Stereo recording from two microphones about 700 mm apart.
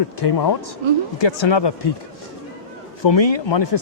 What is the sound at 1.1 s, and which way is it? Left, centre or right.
Speech, left.